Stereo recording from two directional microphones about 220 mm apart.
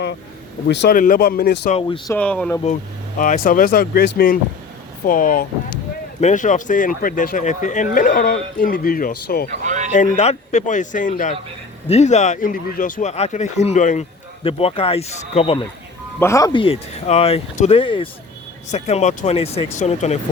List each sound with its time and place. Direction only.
0.7 s speech: 50° left (ahead or behind)
2.0 s speech: 5° left (ahead or behind)
3.2 s speech: 35° left (ahead or behind)
9.6 s a sound: 35° right (ahead or behind)
9.9 s speech: 35° left (ahead or behind)
16.2 s speech: 15° left (ahead or behind); by 20.1 s 30° left (ahead or behind)